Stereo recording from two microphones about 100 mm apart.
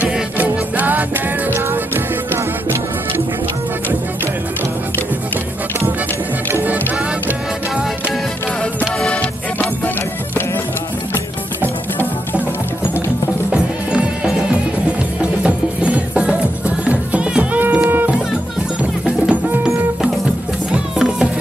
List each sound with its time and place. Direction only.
0.0 s music: 15° right (ahead or behind)
6.5 s music: 15° right (ahead or behind)
8.7 s music: 10° left (ahead or behind)
13.5 s music: 10° right (ahead or behind)
15.4 s music: 10° right (ahead or behind)